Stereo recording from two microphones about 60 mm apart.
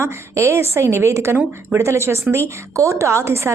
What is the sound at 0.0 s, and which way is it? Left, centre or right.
Speech, right.